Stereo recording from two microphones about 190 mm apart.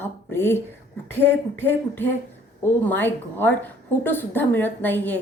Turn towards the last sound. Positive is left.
turn(degrees=10)  # may be behind; listen again after turning